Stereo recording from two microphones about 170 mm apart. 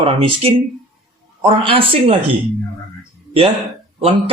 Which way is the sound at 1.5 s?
30° right (ahead or behind).